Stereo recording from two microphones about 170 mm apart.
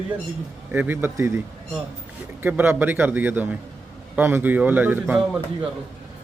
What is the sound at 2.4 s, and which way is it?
Speech, 10° right (ahead or behind).